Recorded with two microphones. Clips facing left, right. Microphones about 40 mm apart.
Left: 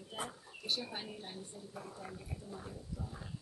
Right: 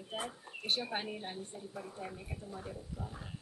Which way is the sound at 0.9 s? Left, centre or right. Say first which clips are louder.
Right 6 dB; right.